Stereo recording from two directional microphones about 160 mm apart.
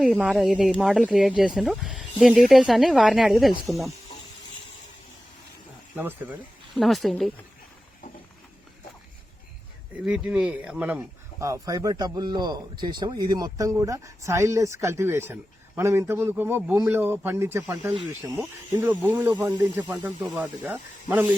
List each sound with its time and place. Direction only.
0.0 s speech: 5° right (ahead or behind)
6.0 s speech: 10° right (ahead or behind)
6.7 s speech: centre (ahead or behind)
10.1 s speech: 5° right (ahead or behind)
18.0 s speech: centre (ahead or behind)
18.7 s speech: 15° right (ahead or behind)